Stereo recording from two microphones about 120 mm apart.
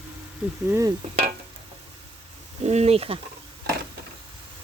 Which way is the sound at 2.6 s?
65° right (ahead or behind).